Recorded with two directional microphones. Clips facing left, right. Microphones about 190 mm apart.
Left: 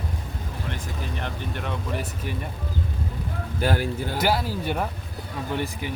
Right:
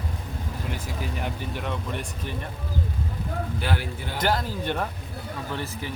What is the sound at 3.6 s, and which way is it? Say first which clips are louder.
Speech: left 5 dB; 45° left (ahead or behind).